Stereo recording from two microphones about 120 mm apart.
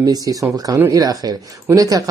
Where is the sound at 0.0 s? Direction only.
30° right (ahead or behind).